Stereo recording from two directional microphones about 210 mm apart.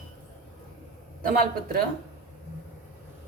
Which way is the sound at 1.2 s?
45° right (ahead or behind).